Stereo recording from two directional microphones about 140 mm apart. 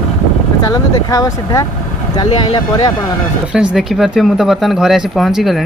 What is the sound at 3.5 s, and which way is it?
Speech, 5° right (ahead or behind).